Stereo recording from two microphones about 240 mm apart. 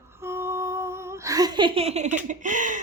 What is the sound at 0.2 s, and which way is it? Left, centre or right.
Humming, centre.